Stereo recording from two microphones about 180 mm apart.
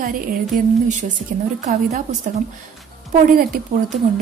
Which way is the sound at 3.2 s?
55° right (ahead or behind).